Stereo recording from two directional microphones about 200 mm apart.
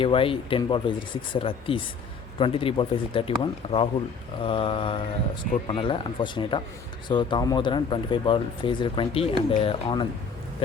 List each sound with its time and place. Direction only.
0.0 s speech: 25° left (ahead or behind)